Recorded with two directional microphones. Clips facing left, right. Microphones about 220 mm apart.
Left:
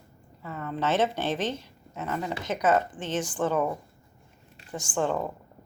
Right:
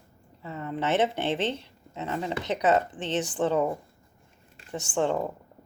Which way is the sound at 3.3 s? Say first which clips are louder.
Right 1 dB; 25° right (ahead or behind).